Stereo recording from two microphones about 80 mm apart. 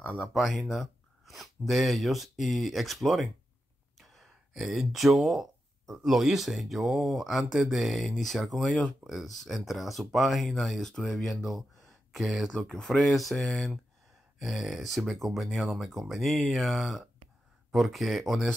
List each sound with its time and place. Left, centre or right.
0.0 s speech: centre
0.3 s speech: centre
12.5 s speech: centre